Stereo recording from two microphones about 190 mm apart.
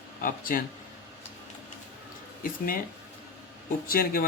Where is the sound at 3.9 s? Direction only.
50° left (ahead or behind).